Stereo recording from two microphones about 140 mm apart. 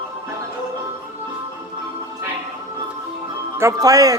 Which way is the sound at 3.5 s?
20° right (ahead or behind).